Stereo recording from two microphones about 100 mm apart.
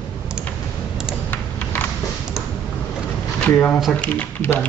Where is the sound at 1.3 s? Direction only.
20° left (ahead or behind).